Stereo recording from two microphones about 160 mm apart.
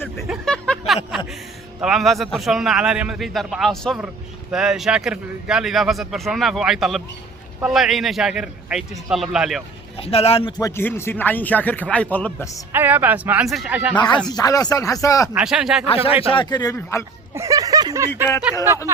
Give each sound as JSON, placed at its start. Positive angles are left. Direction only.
{"t": 0.3, "sound": "a sound", "side_deg": 5}
{"t": 1.8, "sound": "a man's voice", "side_deg": 0}
{"t": 10.0, "sound": "speech", "side_deg": 40}
{"t": 10.6, "sound": "speech", "side_deg": 15}
{"t": 12.7, "sound": "speech", "side_deg": -10}
{"t": 13.9, "sound": "speech", "side_deg": 30}
{"t": 15.4, "sound": "a man's voice", "side_deg": -5}
{"t": 16.3, "sound": "speech", "side_deg": 30}
{"t": 17.3, "sound": "a sound", "side_deg": -20}